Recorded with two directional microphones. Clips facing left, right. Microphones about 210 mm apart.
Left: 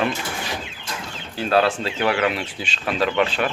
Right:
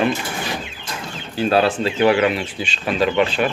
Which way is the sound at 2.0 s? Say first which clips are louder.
Right 6 dB; 20° right (ahead or behind).